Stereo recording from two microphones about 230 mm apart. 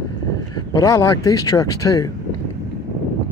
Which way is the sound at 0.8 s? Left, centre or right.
Centre.